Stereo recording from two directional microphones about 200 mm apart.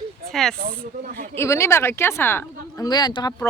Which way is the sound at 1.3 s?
15° left (ahead or behind).